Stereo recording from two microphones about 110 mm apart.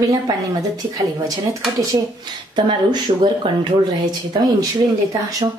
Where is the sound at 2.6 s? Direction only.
45° right (ahead or behind).